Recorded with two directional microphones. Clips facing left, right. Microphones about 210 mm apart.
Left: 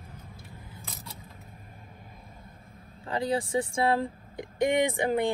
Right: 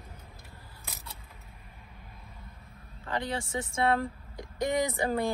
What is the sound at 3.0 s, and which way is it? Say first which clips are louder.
Speech: left 5 dB; 30° left (ahead or behind).